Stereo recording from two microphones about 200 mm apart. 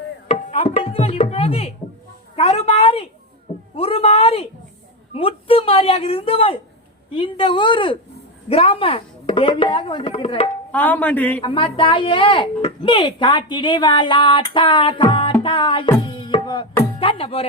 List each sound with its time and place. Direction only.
0.3 s music: 30° left (ahead or behind)
2.3 s a woman's voice: 30° left (ahead or behind)
3.8 s a sound: 30° left (ahead or behind)
5.1 s speech: 30° left (ahead or behind)
10.7 s speech: 10° left (ahead or behind)
11.4 s speech: 25° left (ahead or behind)
16.0 s tabla: 25° left (ahead or behind)
17.0 s speech: 25° left (ahead or behind)